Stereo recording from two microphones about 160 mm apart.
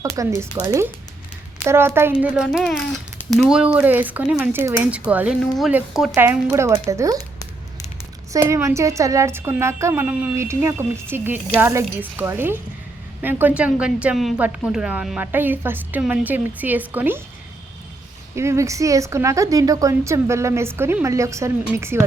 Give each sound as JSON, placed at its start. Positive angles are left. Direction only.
{"t": 0.2, "sound": "a woman's voice", "side_deg": -20}
{"t": 2.3, "sound": "speech", "side_deg": -5}
{"t": 2.6, "sound": "a child's voice", "side_deg": 10}
{"t": 3.3, "sound": "a woman's voice", "side_deg": -5}
{"t": 8.3, "sound": "a woman's voice", "side_deg": -20}
{"t": 18.3, "sound": "speech", "side_deg": -15}